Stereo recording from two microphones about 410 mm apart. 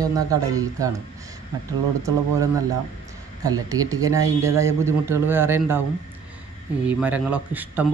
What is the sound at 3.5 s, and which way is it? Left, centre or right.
A man's voice, centre.